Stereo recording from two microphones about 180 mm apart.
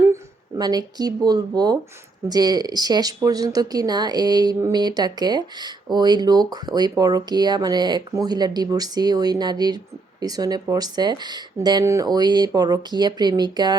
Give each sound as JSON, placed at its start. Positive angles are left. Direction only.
{"t": 0.1, "sound": "speech", "side_deg": -20}